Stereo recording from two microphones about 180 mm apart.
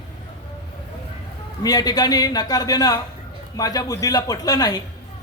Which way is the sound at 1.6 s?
20° left (ahead or behind).